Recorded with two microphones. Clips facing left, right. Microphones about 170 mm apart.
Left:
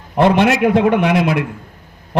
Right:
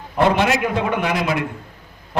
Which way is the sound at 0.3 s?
60° left (ahead or behind).